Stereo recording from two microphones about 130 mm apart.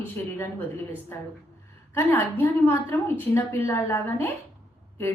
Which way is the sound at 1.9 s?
15° left (ahead or behind).